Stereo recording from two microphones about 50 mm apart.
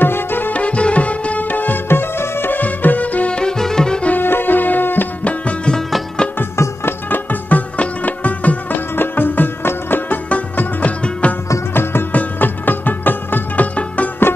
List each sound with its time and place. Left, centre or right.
0.0 s music: left
0.5 s music: left
1.9 s music: left; by 4.0 s centre
4.2 s music: left
7.1 s music: left
8.9 s music: left
14.2 s music: left